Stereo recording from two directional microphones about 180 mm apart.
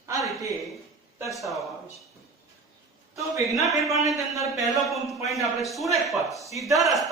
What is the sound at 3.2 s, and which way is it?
A man's voice, 15° right (ahead or behind).